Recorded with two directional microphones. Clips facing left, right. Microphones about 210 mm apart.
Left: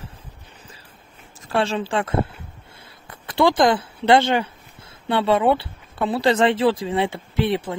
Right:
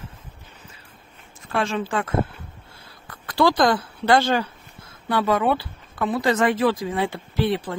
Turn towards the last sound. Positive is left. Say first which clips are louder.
# left 1 dB
turn(degrees=25)  # may be behind; listen again after turning